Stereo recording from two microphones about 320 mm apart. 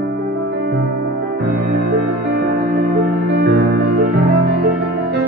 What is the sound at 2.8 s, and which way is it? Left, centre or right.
Music, right.